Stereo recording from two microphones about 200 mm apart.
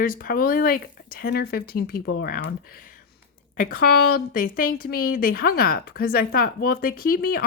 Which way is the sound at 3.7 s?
45° left (ahead or behind).